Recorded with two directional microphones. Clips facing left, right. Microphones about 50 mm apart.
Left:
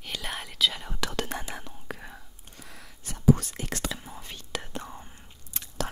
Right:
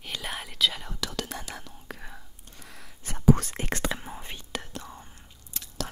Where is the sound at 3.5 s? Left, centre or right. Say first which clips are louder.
Right 3 dB; right.